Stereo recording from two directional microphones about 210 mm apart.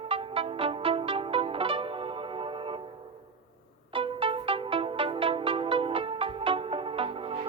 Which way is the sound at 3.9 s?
25° right (ahead or behind).